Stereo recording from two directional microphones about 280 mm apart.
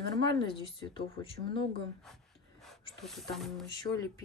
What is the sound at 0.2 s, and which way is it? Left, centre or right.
Speech, centre.